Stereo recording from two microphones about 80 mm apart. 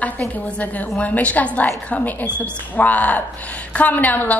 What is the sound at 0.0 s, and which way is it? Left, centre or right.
A woman's voice, centre.